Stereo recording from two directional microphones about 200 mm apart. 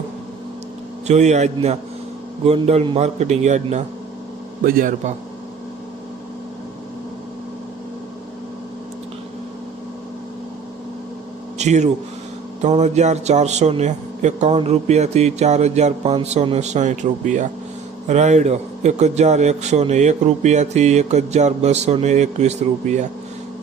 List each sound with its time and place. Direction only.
1.0 s a man's voice: 35° right (ahead or behind)
11.5 s a man's voice: 35° right (ahead or behind)